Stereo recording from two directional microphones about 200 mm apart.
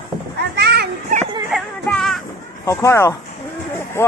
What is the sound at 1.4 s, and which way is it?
Music, centre (ahead or behind).